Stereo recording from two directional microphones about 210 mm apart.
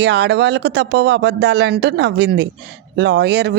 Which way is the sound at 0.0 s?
55° right (ahead or behind).